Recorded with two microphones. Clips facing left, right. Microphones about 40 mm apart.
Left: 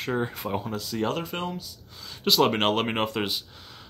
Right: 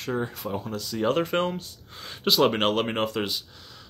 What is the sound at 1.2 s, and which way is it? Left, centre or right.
Speech, right.